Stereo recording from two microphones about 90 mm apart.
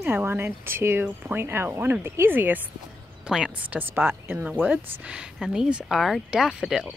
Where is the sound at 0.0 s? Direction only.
20° right (ahead or behind).